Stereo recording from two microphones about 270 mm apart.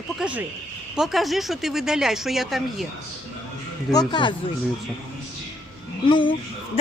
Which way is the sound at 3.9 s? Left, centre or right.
Centre.